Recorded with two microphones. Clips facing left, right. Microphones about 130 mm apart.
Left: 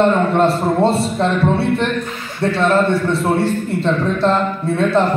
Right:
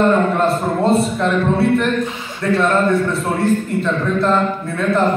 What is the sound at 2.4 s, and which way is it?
A man's voice, 30° left (ahead or behind).